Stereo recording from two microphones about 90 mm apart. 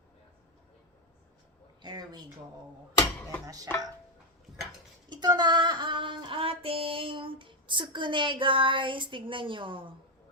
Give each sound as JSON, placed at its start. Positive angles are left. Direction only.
{"t": 1.8, "sound": "a sound", "side_deg": -50}
{"t": 3.4, "sound": "chopping", "side_deg": -40}
{"t": 5.0, "sound": "child singing", "side_deg": -55}